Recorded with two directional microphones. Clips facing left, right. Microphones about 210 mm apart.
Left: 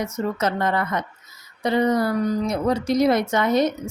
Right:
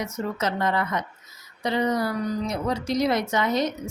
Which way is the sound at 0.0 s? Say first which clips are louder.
Left 4 dB; 50° left (ahead or behind).